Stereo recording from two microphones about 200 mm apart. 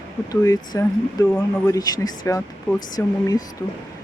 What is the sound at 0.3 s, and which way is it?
Speech, 15° left (ahead or behind).